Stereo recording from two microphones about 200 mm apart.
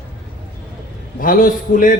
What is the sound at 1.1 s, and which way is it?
Speech, 45° left (ahead or behind).